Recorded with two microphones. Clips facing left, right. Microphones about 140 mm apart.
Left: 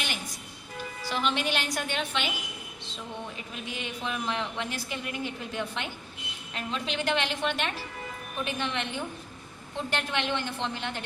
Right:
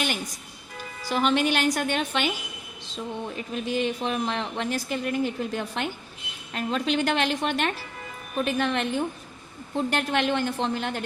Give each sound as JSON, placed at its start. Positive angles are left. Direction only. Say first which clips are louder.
{"t": 1.1, "sound": "a woman's voice", "louder": "right 6 dB", "side_deg": -45}
{"t": 3.5, "sound": "a woman's voice", "louder": "right 14 dB", "side_deg": -35}